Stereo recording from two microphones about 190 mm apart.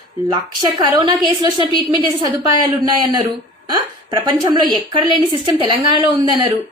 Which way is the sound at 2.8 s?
20° right (ahead or behind).